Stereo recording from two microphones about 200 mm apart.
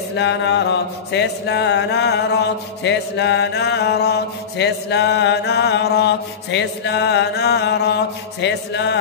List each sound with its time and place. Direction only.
0.1 s mantra: 60° left (ahead or behind)